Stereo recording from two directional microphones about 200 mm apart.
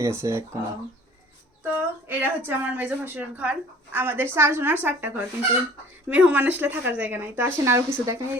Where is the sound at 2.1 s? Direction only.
10° right (ahead or behind).